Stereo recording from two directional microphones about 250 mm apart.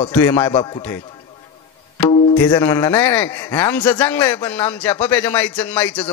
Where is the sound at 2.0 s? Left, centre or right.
Centre.